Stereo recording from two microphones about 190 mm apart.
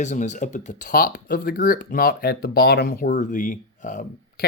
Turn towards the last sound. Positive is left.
turn(degrees=45)  # may be behind; listen again after turning